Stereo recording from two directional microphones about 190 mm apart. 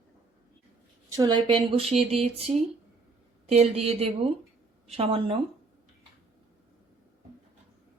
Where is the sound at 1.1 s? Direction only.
20° right (ahead or behind).